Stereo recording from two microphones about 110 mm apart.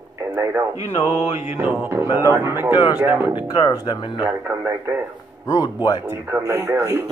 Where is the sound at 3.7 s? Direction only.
45° left (ahead or behind).